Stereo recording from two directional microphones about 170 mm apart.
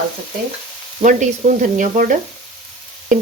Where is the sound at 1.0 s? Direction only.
50° right (ahead or behind).